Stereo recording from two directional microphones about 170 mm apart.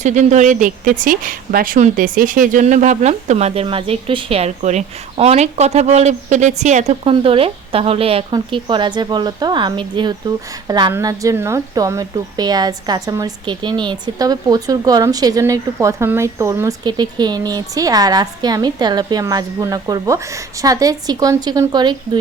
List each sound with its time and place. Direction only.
0.0 s speech: 45° right (ahead or behind); by 22.2 s 25° right (ahead or behind)